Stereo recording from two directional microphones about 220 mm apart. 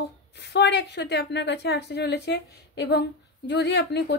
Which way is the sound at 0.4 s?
50° left (ahead or behind).